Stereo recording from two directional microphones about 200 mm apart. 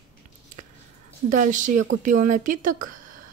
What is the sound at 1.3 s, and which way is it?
Speech, 40° right (ahead or behind).